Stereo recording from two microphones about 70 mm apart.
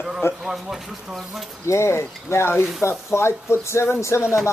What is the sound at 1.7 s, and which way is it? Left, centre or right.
Speech, left.